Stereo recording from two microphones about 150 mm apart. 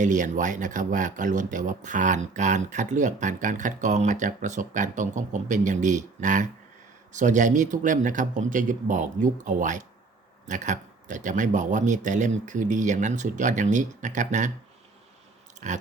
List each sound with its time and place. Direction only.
0.0 s speech: 60° right (ahead or behind)
15.6 s biting: 50° right (ahead or behind)